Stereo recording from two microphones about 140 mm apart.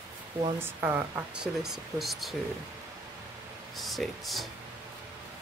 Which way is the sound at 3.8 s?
Centre (ahead or behind).